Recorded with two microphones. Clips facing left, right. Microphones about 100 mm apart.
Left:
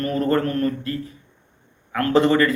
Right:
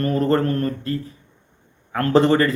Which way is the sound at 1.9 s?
30° right (ahead or behind).